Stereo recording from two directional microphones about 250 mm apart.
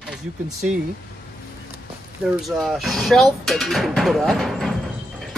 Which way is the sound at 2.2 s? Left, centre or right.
Centre.